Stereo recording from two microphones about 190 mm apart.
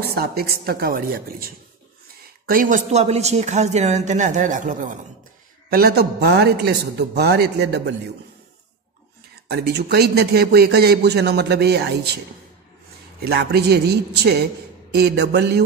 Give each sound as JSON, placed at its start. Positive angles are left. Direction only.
{"t": 0.0, "sound": "a woman's voice", "side_deg": -55}
{"t": 5.7, "sound": "speech", "side_deg": -55}
{"t": 9.5, "sound": "speech", "side_deg": -60}
{"t": 13.2, "sound": "speech", "side_deg": -55}